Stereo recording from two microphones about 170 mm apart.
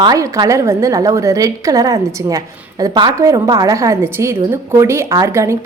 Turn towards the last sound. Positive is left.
turn(degrees=-15)  # may be behind; listen again after turning